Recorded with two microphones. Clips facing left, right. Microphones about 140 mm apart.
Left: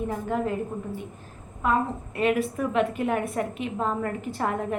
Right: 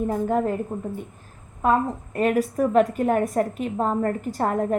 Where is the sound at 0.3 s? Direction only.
45° right (ahead or behind).